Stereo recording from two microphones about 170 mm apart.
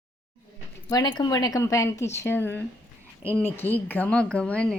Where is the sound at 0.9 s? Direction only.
25° left (ahead or behind).